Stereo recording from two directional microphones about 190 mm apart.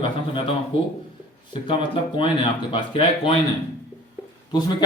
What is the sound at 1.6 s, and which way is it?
A man's voice, 25° left (ahead or behind).